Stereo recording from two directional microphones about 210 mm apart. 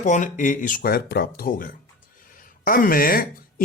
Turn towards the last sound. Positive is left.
turn(degrees=45)  # may be behind; listen again after turning